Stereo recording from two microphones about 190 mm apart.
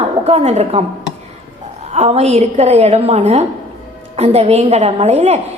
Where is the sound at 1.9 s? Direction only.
35° right (ahead or behind).